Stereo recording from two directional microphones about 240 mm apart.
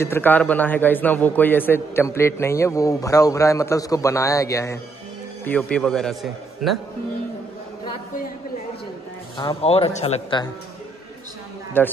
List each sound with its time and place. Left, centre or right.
0.0 s a man's voice: centre
9.4 s speech: left
11.8 s a man's voice: centre